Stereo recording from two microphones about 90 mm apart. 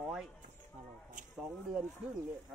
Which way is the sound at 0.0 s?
5° right (ahead or behind).